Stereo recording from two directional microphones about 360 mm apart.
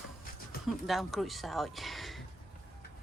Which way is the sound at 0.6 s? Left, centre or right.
Centre.